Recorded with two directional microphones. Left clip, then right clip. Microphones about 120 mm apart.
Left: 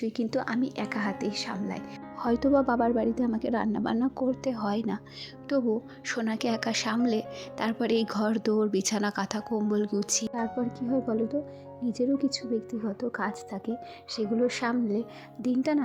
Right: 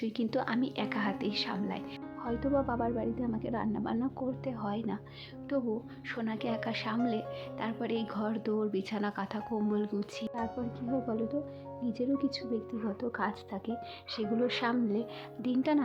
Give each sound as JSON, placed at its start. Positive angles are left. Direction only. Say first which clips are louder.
{"t": 0.0, "sound": "speech", "louder": "left 3 dB", "side_deg": 30}
{"t": 2.2, "sound": "speech", "louder": "left 7 dB", "side_deg": 55}
{"t": 6.1, "sound": "speech", "louder": "left 6 dB", "side_deg": 45}
{"t": 10.3, "sound": "speech", "louder": "left 5 dB", "side_deg": 55}